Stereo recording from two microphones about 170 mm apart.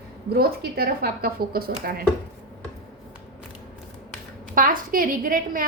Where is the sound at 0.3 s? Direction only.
65° right (ahead or behind).